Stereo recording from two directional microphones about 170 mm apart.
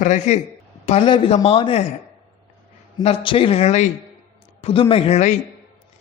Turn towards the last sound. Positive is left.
turn(degrees=40)  # may be behind; listen again after turning